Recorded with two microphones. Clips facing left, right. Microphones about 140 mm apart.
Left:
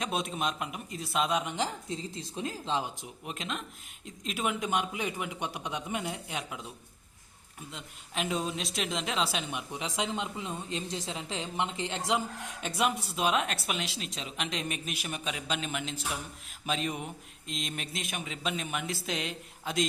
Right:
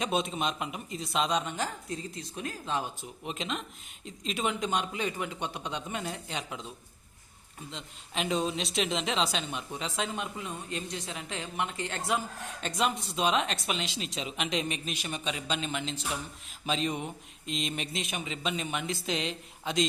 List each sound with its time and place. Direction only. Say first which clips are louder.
0.0 s speech: right 2 dB; centre (ahead or behind)
1.5 s speech: left 1 dB; 20° left (ahead or behind)
3.2 s a woman's voice: right 2 dB; centre (ahead or behind)